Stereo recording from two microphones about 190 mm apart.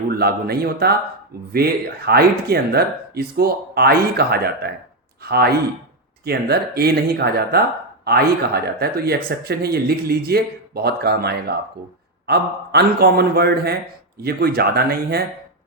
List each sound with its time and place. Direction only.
0.1 s speech: 55° right (ahead or behind)